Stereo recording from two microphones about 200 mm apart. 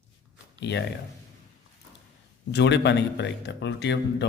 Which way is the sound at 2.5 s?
60° left (ahead or behind).